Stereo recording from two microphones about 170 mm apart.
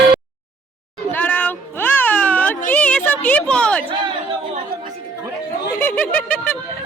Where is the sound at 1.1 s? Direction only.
10° left (ahead or behind).